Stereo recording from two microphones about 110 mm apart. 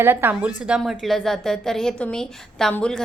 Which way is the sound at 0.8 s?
Centre (ahead or behind).